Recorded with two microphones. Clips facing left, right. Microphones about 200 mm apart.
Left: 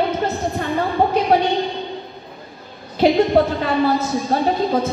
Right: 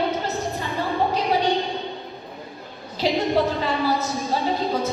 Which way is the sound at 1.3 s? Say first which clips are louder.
Left 7 dB; 55° left (ahead or behind).